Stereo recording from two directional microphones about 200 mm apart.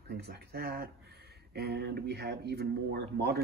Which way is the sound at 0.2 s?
55° right (ahead or behind).